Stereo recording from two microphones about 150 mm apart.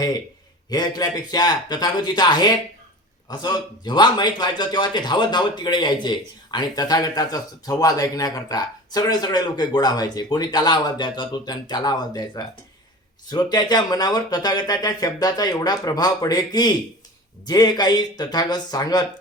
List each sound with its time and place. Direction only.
0.7 s a man's voice: 25° left (ahead or behind)